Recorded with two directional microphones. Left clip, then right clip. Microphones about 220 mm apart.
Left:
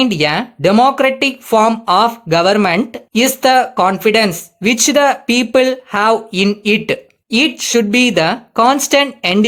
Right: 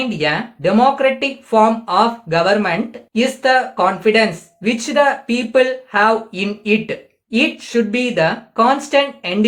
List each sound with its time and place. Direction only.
0.0 s speech: 50° left (ahead or behind)